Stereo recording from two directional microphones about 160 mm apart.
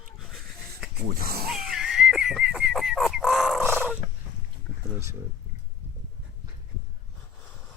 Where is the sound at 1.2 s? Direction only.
70° right (ahead or behind).